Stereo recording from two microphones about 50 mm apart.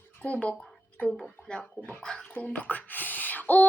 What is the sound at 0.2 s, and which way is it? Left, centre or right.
Speech, left.